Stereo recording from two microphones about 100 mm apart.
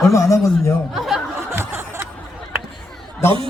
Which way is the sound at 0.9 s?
Centre (ahead or behind).